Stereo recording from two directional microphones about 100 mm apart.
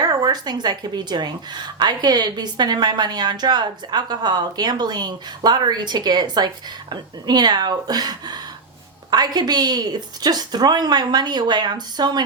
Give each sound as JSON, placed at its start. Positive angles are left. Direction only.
{"t": 0.0, "sound": "a woman's voice", "side_deg": -40}